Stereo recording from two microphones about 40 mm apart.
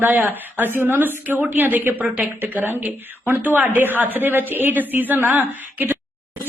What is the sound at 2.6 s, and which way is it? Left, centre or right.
A man's voice, right.